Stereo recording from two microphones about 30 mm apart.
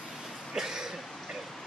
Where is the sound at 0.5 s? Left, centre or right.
Centre.